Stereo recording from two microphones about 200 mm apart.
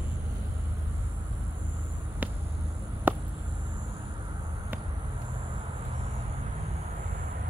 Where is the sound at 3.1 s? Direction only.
10° right (ahead or behind).